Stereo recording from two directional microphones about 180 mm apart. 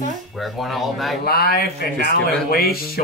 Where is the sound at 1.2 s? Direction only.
55° left (ahead or behind).